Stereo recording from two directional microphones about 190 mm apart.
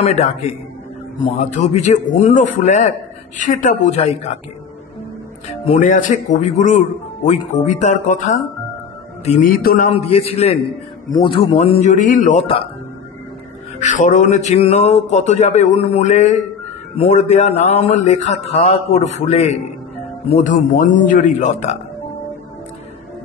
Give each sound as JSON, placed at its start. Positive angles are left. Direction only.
{"t": 0.0, "sound": "speech", "side_deg": 35}
{"t": 5.5, "sound": "a man's voice", "side_deg": 40}
{"t": 9.9, "sound": "speech", "side_deg": 30}
{"t": 13.7, "sound": "speech", "side_deg": 40}